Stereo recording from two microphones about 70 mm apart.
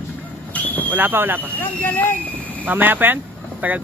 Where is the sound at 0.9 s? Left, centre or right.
Right.